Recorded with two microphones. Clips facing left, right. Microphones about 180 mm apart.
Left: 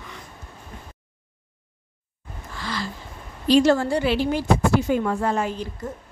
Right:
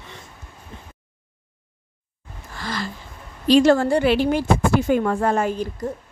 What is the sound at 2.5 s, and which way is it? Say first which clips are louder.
Gasp: right 1 dB; 50° right (ahead or behind).